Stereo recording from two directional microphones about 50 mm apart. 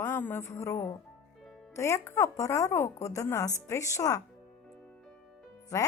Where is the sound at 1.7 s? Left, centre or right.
Left.